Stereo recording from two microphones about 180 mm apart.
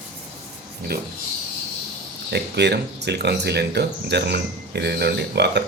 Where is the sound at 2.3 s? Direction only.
70° right (ahead or behind).